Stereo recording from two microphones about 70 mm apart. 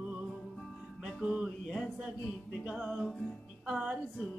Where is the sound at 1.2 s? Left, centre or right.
Centre.